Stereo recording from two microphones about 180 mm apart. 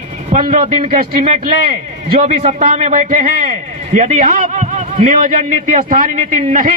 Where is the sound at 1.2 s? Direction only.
40° right (ahead or behind).